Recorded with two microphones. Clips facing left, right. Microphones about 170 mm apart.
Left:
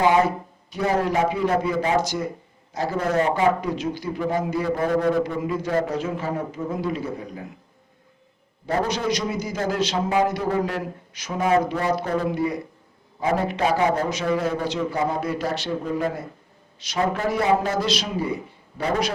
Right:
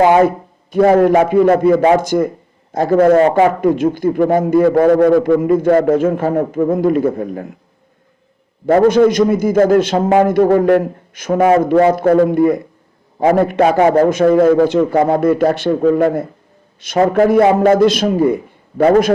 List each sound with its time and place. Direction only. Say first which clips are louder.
0.0 s a man's voice: right 8 dB; 55° right (ahead or behind)
3.2 s a man's voice: right 9 dB; 70° right (ahead or behind); by 4.7 s 50° right (ahead or behind)
4.7 s a man's voice: right 9 dB; 80° right
5.4 s a man's voice: right 12 dB; 50° right (ahead or behind)
8.6 s a man's voice: right 14 dB; 55° right (ahead or behind)
15.8 s speech: right 13 dB; 80° right
16.8 s a man's voice: right 12 dB; 55° right (ahead or behind)